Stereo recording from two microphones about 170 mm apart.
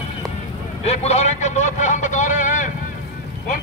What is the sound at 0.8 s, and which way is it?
Vehicle, 40° left (ahead or behind).